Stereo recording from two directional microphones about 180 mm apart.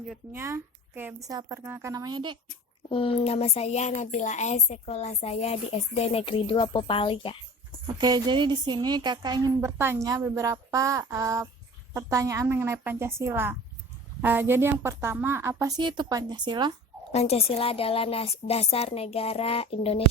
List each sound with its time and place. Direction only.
0.3 s a woman's voice: 15° right (ahead or behind)
2.9 s a woman's voice: 30° left (ahead or behind)
7.9 s a woman's voice: 25° right (ahead or behind)
17.1 s a woman's voice: 35° left (ahead or behind)